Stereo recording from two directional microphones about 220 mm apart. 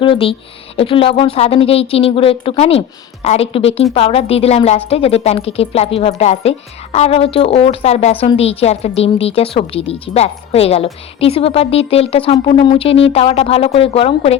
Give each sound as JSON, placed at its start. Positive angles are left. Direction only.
{"t": 0.0, "sound": "a woman's voice", "side_deg": 25}